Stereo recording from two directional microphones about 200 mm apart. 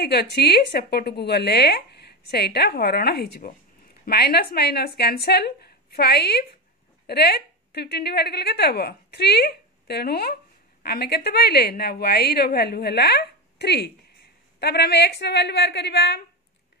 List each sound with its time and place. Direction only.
0.0 s a woman's voice: 55° left (ahead or behind)